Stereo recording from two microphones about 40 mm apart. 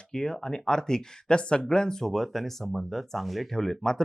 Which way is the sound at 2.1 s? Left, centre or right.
Centre.